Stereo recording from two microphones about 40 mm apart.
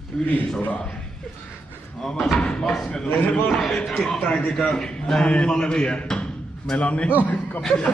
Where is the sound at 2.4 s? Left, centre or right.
Left.